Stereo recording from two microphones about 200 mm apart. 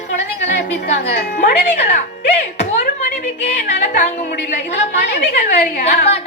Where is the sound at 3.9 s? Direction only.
35° left (ahead or behind).